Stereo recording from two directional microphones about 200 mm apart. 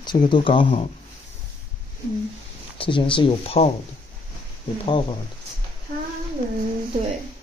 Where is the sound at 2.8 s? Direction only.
25° left (ahead or behind).